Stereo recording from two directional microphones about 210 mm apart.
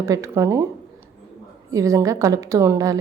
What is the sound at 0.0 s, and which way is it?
A woman's voice, 15° right (ahead or behind).